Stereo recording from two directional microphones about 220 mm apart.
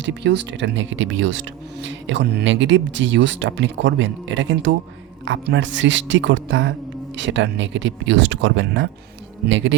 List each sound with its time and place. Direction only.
0.0 s speech: 55° right (ahead or behind)